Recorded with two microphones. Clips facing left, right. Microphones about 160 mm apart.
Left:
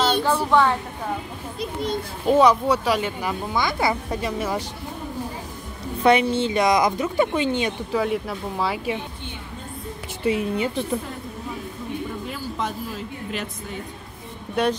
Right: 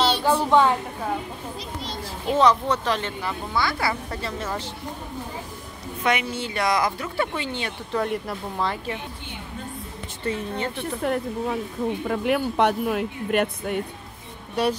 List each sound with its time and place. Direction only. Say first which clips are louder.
0.2 s a woman's voice: even; 15° right (ahead or behind)
1.6 s a child's voice: left 7 dB; 55° left (ahead or behind)
2.3 s speech: left 2 dB; 10° left (ahead or behind)
6.0 s speech: left 7 dB; 30° left (ahead or behind)
7.9 s speech: even; centre (ahead or behind)
10.2 s speech: left 5 dB; 10° left (ahead or behind)
10.8 s a woman's voice: right 2 dB; 70° right (ahead or behind)
14.5 s speech: left 1 dB; 5° right (ahead or behind)